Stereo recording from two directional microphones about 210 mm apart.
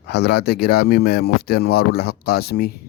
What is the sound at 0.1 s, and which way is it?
Speech, 50° left (ahead or behind).